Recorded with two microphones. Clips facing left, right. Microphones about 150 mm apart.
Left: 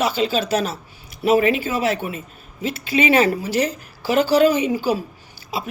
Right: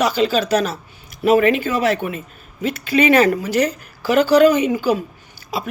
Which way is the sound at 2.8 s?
50° right (ahead or behind).